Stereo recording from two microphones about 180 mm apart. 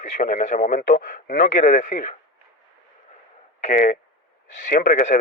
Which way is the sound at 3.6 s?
50° left (ahead or behind).